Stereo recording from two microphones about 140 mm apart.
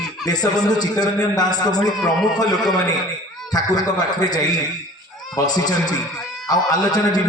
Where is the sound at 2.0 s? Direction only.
5° left (ahead or behind).